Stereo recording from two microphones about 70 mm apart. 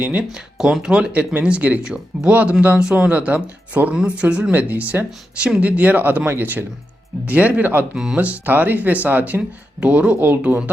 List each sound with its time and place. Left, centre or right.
0.0 s speech: right
0.6 s speech: centre; by 7.9 s right
7.9 s speech: centre; by 10.6 s right